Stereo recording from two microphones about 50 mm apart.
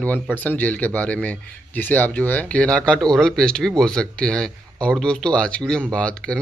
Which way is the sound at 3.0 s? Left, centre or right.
Centre.